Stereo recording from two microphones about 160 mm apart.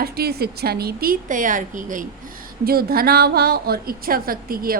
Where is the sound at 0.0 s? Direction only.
75° right (ahead or behind); by 2.0 s 55° right (ahead or behind).